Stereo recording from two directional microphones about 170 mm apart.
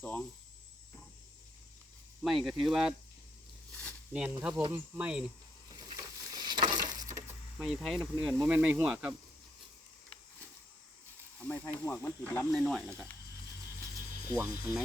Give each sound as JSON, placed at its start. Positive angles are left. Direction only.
{"t": 0.0, "sound": "speech", "side_deg": 10}
{"t": 2.2, "sound": "speech", "side_deg": 0}
{"t": 3.7, "sound": "a sound", "side_deg": 10}
{"t": 4.1, "sound": "speech", "side_deg": -10}
{"t": 5.7, "sound": "a sound", "side_deg": -25}
{"t": 7.6, "sound": "speech", "side_deg": 0}
{"t": 11.3, "sound": "speech", "side_deg": 10}
{"t": 12.5, "sound": "speech", "side_deg": 0}
{"t": 14.3, "sound": "speech", "side_deg": -15}